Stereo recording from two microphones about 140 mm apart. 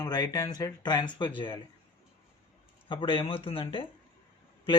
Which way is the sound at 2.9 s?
40° left (ahead or behind).